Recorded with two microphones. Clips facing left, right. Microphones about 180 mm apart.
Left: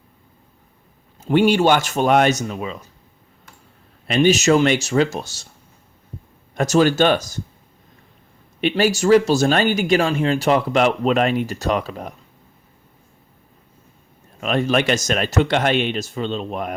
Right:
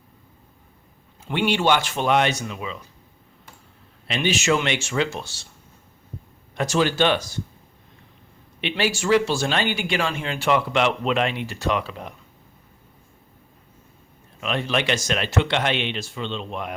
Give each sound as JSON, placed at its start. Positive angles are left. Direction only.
{"t": 1.2, "sound": "speech", "side_deg": 40}
{"t": 4.1, "sound": "speech", "side_deg": 45}
{"t": 6.6, "sound": "speech", "side_deg": 45}
{"t": 8.6, "sound": "speech", "side_deg": 40}
{"t": 14.4, "sound": "speech", "side_deg": 45}